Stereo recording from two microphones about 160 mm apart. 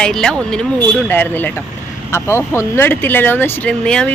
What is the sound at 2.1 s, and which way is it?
Speech, 15° left (ahead or behind).